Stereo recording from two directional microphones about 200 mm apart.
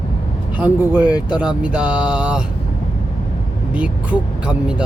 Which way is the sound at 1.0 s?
20° left (ahead or behind).